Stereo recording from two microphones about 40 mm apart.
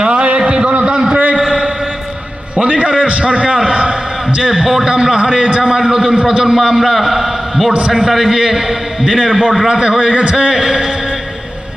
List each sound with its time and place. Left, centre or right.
0.0 s a sound: right
2.6 s a man's voice: right
4.4 s a man's voice: centre
7.7 s a man's voice: right
10.5 s a man's voice: centre